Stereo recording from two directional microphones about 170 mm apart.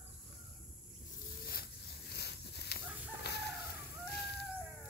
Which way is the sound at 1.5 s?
65° left (ahead or behind).